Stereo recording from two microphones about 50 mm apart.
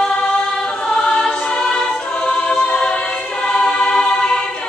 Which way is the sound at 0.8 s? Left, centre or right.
Centre.